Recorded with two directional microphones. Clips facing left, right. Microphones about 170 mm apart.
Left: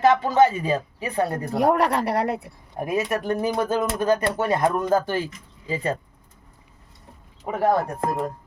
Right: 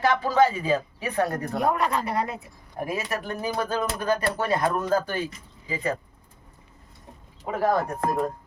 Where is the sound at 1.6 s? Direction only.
70° left (ahead or behind).